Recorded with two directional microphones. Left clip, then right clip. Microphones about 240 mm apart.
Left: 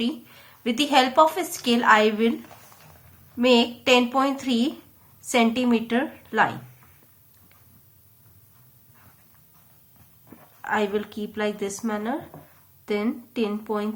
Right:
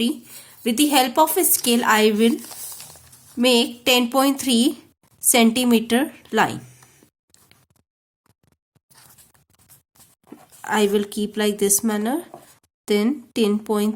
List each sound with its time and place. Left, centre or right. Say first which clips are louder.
0.0 s a woman's voice: right 4 dB; right
3.3 s a woman's voice: right 1 dB; right
10.6 s a woman's voice: right 5 dB; right